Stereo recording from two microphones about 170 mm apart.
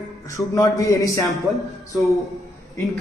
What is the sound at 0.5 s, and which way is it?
Speech, 20° left (ahead or behind).